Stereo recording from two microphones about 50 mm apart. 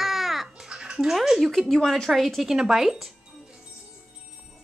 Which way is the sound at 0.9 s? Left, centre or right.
Centre.